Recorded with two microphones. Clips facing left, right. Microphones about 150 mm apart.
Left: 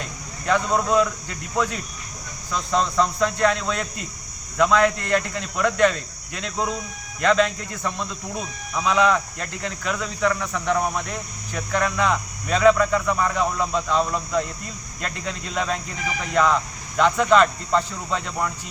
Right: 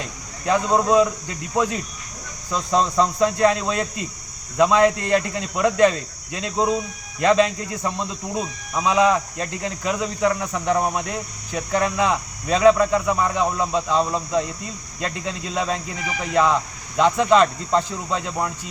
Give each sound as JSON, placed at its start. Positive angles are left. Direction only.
{"t": 0.4, "sound": "speech", "side_deg": -25}
{"t": 2.5, "sound": "speech", "side_deg": -30}
{"t": 15.5, "sound": "speech", "side_deg": -30}
{"t": 16.3, "sound": "speech", "side_deg": -15}
{"t": 17.0, "sound": "speech", "side_deg": -30}